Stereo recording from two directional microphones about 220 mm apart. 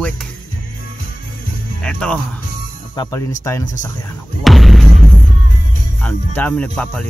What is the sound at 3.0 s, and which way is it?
Speech, 15° left (ahead or behind).